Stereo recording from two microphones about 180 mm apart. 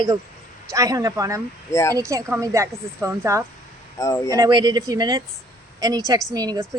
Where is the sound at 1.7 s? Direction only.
15° left (ahead or behind).